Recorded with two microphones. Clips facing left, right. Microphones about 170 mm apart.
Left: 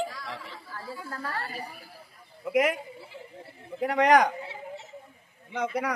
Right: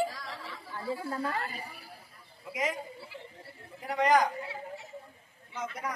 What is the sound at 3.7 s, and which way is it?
Speech, 70° left (ahead or behind).